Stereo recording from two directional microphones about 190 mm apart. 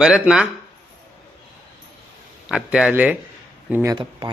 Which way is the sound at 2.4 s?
5° right (ahead or behind).